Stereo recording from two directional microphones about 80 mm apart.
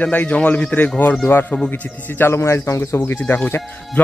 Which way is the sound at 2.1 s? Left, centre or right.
Left.